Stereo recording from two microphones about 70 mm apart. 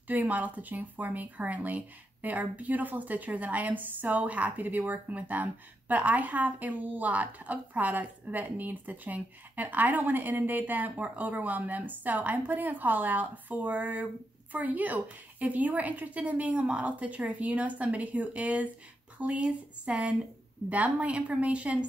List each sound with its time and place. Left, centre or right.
0.1 s a woman's voice: right